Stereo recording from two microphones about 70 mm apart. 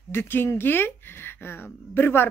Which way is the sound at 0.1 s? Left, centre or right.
Left.